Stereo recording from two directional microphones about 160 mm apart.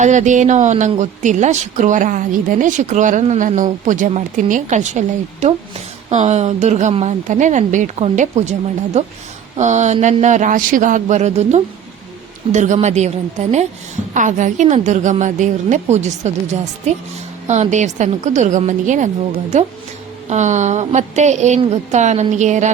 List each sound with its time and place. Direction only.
0.0 s speech: 50° right (ahead or behind)
17.5 s speech: 45° right (ahead or behind)